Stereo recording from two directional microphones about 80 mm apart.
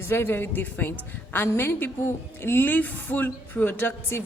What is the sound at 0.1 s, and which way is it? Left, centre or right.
A woman's voice, left.